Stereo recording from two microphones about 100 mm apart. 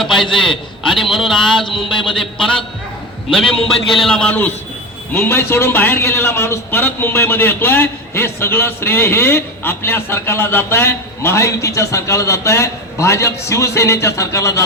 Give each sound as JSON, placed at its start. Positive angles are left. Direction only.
{"t": 0.0, "sound": "a sound", "side_deg": 5}
{"t": 3.3, "sound": "a man's voice", "side_deg": 5}
{"t": 5.1, "sound": "a man's voice", "side_deg": 25}